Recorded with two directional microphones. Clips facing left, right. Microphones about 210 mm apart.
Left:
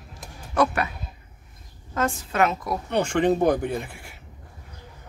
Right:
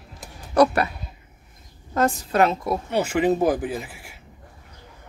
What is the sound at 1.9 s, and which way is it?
Speech, 40° right (ahead or behind).